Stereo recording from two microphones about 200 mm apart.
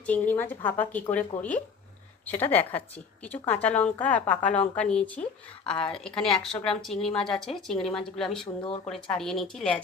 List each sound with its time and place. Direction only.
0.0 s a woman's voice: 10° left (ahead or behind)
8.6 s speech: 25° left (ahead or behind)
8.9 s speech: centre (ahead or behind)